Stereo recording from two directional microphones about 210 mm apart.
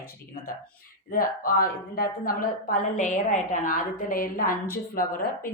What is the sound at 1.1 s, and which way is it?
A woman's voice, 40° left (ahead or behind).